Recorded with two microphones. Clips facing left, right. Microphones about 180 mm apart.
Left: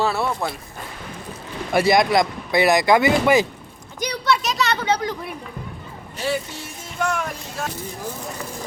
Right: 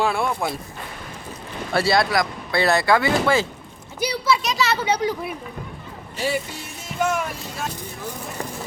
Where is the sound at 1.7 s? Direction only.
15° left (ahead or behind).